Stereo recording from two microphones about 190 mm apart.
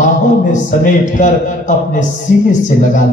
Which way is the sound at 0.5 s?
40° left (ahead or behind).